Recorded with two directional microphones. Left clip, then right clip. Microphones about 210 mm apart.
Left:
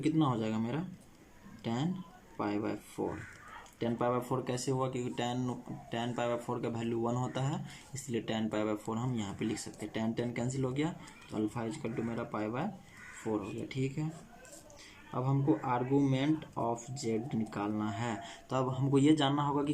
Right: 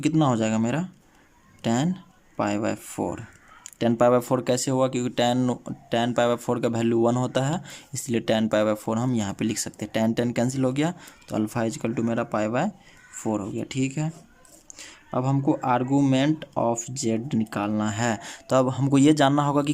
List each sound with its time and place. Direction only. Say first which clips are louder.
0.0 s speech: right 9 dB; 55° right (ahead or behind)